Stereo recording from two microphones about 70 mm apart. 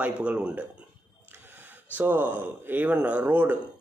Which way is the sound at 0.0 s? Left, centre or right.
Centre.